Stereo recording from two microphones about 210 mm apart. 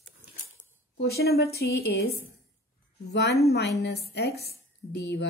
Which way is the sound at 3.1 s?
55° left (ahead or behind).